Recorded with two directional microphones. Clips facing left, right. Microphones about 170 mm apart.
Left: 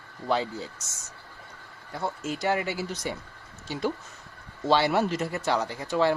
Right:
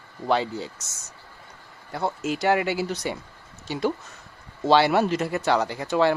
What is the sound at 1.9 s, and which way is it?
Speech, 75° right (ahead or behind).